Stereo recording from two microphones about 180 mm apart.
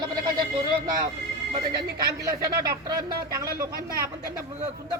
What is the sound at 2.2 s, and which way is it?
Speech, 20° right (ahead or behind).